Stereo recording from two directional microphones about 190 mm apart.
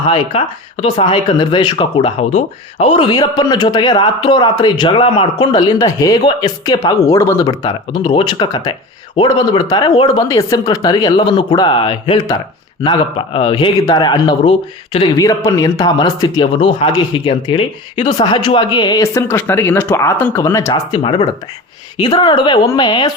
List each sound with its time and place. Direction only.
0.1 s speech: 30° left (ahead or behind)
20.9 s speech: 25° left (ahead or behind)